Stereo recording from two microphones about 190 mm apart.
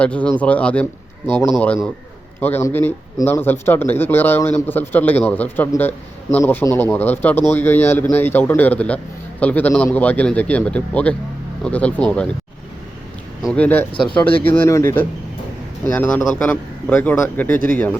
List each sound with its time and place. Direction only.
0.0 s speech: 5° left (ahead or behind)
13.4 s speech: 5° left (ahead or behind)
14.1 s speech: 25° left (ahead or behind)
14.4 s speech: 15° left (ahead or behind)